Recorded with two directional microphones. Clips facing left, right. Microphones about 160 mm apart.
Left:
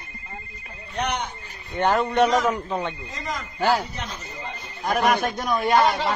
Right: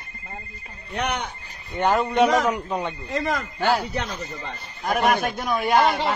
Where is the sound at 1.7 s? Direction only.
10° right (ahead or behind).